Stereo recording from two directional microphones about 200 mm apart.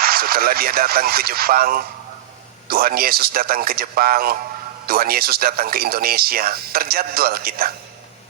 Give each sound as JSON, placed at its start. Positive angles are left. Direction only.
{"t": 0.0, "sound": "speech", "side_deg": -50}